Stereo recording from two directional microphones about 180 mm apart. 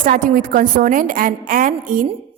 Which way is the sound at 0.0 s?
50° right (ahead or behind).